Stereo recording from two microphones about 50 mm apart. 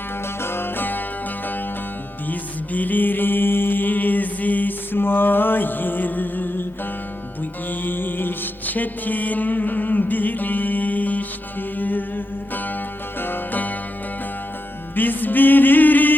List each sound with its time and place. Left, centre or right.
0.4 s music: left
2.3 s music: left
7.7 s music: left
14.9 s music: left